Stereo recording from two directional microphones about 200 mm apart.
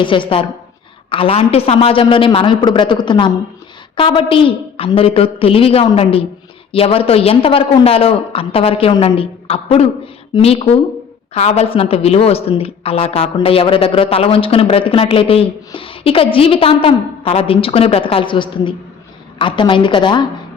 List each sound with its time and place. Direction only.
0.0 s speech: 25° left (ahead or behind)